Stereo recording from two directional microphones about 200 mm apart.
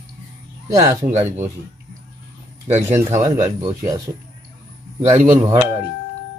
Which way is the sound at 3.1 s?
15° right (ahead or behind).